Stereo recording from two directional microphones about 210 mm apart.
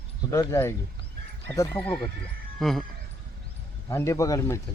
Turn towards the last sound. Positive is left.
turn(degrees=15)  # may be behind; listen again after turning